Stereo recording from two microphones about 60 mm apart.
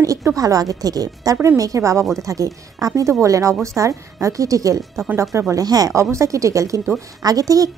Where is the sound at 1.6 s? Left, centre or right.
Right.